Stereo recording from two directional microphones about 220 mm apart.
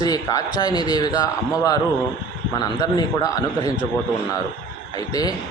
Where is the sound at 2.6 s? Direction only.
20° left (ahead or behind).